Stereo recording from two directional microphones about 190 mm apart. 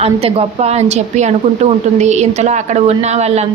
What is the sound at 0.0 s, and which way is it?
A woman's voice, 30° right (ahead or behind).